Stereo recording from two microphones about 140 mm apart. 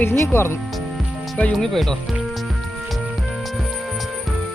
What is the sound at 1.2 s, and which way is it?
Music, 5° left (ahead or behind).